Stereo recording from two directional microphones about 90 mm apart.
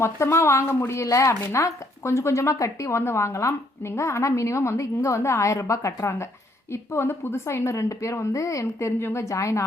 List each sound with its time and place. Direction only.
0.0 s speech: 30° left (ahead or behind)